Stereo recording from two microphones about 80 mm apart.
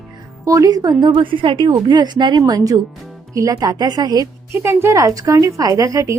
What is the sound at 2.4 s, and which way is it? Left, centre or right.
Speech, right.